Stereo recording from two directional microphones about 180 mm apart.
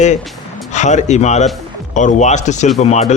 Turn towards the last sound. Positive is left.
turn(degrees=40)  # may be behind; listen again after turning